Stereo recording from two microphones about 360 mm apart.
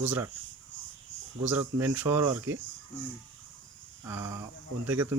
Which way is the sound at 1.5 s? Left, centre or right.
Centre.